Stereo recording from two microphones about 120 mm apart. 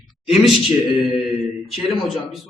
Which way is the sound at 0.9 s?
45° left (ahead or behind).